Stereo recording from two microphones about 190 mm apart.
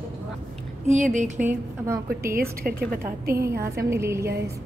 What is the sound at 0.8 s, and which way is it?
Speech, 40° right (ahead or behind).